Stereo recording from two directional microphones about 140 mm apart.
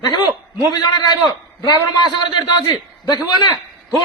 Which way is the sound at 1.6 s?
30° left (ahead or behind).